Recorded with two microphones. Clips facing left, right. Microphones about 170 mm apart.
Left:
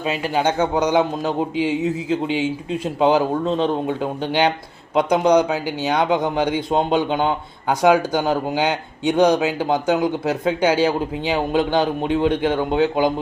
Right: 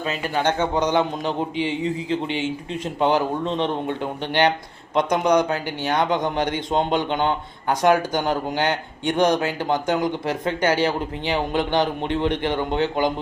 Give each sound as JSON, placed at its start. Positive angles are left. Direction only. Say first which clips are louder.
{"t": 0.0, "sound": "speech", "louder": "left 3 dB", "side_deg": 10}